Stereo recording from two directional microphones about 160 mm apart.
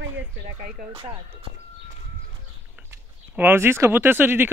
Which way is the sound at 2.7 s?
10° right (ahead or behind).